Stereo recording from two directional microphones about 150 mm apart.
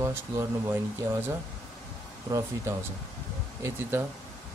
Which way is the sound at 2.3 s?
20° right (ahead or behind).